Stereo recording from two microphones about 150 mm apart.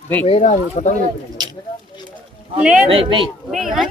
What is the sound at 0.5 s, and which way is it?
Speech, 55° left (ahead or behind).